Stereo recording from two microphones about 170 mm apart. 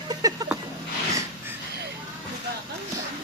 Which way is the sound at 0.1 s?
20° right (ahead or behind).